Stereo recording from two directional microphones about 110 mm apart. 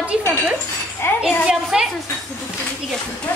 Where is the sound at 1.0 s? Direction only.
20° left (ahead or behind).